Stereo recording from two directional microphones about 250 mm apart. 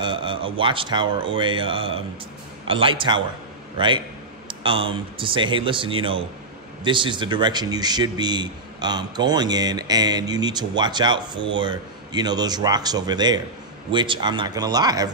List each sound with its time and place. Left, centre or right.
0.0 s speech: centre